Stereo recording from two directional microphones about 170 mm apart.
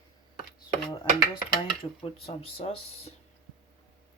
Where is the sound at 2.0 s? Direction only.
30° left (ahead or behind).